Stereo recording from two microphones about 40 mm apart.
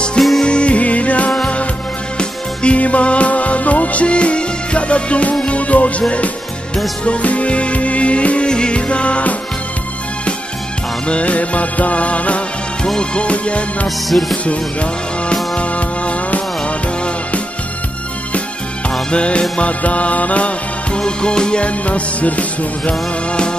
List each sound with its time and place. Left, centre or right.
0.4 s music: left
11.1 s music: left
12.8 s music: centre
13.2 s music: left
13.8 s music: centre
14.3 s music: left
19.0 s music: left